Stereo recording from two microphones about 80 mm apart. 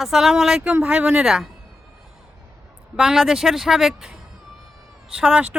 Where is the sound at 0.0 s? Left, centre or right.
Centre.